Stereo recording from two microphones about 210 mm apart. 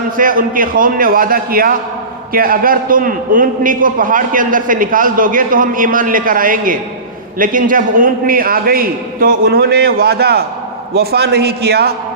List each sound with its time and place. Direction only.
0.2 s a man's voice: 40° right (ahead or behind)